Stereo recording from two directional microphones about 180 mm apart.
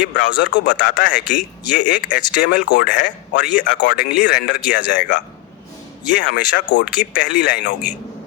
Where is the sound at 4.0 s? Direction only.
65° left (ahead or behind).